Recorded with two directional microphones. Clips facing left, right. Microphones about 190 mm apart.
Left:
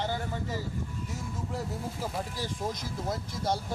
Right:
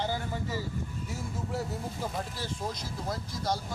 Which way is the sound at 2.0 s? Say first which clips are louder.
Left 2 dB; 10° left (ahead or behind).